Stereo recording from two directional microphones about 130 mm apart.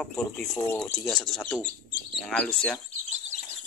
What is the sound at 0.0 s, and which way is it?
Speech, 5° left (ahead or behind).